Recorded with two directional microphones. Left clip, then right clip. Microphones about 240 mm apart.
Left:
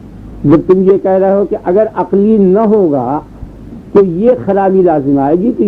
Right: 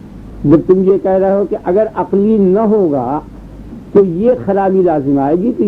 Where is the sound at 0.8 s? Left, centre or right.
Left.